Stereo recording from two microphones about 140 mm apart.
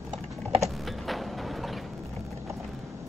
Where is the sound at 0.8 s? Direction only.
Centre (ahead or behind).